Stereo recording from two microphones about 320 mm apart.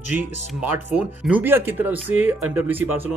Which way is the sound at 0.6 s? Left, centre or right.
Centre.